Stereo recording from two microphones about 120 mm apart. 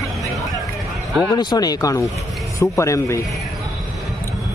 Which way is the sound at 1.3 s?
35° left (ahead or behind).